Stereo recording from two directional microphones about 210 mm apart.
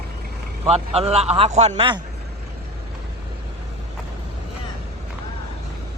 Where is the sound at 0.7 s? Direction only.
30° right (ahead or behind).